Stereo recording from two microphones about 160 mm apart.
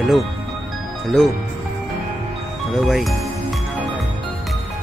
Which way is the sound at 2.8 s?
Centre (ahead or behind).